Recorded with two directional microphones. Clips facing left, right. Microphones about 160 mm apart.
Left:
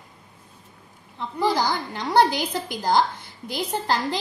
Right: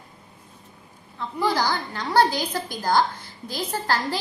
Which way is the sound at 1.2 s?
20° left (ahead or behind).